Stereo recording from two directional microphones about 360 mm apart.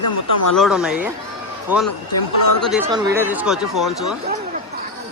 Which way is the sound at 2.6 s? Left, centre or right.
Centre.